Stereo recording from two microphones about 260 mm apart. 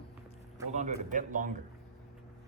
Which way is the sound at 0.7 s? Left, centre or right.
Right.